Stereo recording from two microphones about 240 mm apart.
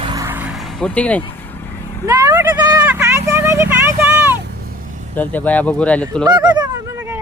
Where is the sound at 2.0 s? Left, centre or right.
Centre.